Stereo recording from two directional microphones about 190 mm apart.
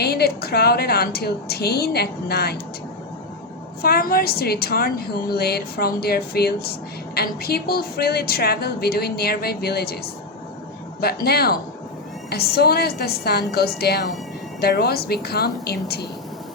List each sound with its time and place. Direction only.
0.0 s a woman's voice: 55° left (ahead or behind)
3.8 s a woman's voice: 50° left (ahead or behind)
11.0 s a woman's voice: 55° left (ahead or behind)